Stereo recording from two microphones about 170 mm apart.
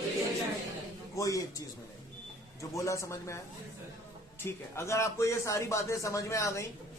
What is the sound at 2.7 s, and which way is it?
Speech, 20° left (ahead or behind).